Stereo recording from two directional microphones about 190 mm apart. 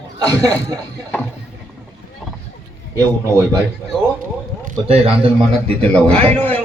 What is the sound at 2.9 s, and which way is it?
Speech, 15° right (ahead or behind).